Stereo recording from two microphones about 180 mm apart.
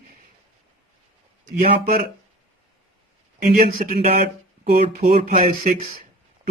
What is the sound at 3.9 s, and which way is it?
Speech, 35° right (ahead or behind).